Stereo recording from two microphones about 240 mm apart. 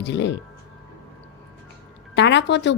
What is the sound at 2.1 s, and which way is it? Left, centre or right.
Speech, left.